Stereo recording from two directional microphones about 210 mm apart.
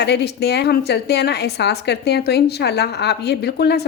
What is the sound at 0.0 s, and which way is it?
A woman's voice, 55° left (ahead or behind).